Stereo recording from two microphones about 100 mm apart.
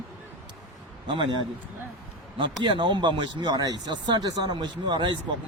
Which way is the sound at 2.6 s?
50° right (ahead or behind).